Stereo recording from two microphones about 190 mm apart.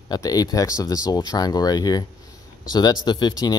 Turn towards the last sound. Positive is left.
turn(degrees=20)  # may be behind; listen again after turning